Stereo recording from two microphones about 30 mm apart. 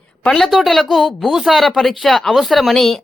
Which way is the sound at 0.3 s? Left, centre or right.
Centre.